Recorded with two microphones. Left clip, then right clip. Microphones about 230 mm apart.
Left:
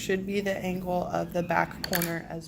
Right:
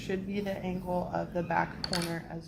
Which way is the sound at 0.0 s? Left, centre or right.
Left.